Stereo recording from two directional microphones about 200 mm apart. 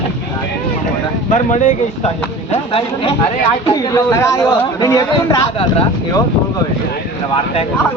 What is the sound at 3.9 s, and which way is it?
Speech, 15° left (ahead or behind).